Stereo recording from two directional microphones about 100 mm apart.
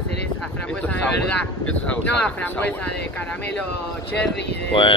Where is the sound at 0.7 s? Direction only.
15° left (ahead or behind).